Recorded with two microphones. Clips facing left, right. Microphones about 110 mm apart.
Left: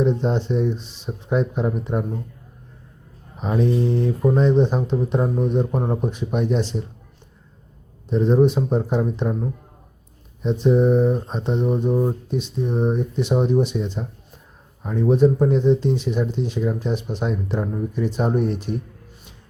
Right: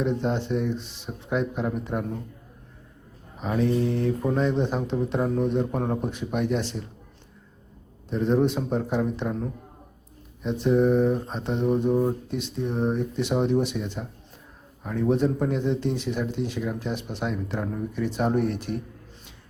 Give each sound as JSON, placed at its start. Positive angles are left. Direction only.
{"t": 0.0, "sound": "speech", "side_deg": 20}
{"t": 3.3, "sound": "speech", "side_deg": 20}
{"t": 8.1, "sound": "speech", "side_deg": 15}